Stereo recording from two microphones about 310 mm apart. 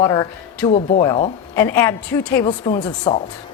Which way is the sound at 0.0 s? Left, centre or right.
Centre.